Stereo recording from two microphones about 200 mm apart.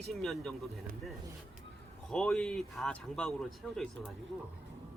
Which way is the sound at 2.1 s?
5° left (ahead or behind).